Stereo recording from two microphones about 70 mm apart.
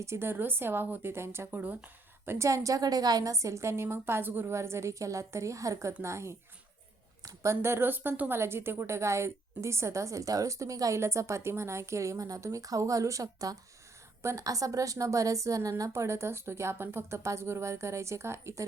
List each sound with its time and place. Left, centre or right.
0.0 s speech: right
1.5 s speech: right
2.2 s a woman's voice: right
4.5 s a woman's voice: right
7.4 s speech: right
8.3 s a woman's voice: right
14.2 s a woman's voice: right